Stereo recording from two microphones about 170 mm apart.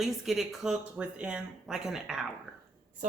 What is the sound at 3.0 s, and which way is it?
Speech, 45° right (ahead or behind).